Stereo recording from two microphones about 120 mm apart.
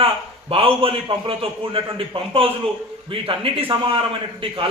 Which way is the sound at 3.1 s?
50° right (ahead or behind).